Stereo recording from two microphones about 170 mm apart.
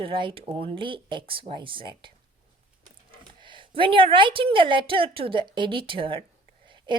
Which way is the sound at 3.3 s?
30° right (ahead or behind).